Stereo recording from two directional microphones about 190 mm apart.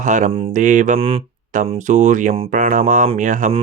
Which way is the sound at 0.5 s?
40° right (ahead or behind).